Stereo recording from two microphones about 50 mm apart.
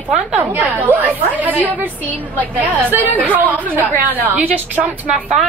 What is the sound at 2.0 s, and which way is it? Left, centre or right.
Speech, left.